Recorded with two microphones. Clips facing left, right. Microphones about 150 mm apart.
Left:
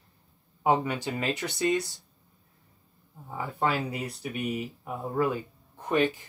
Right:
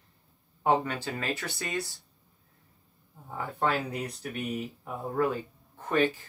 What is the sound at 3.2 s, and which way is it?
Speech, 5° left (ahead or behind).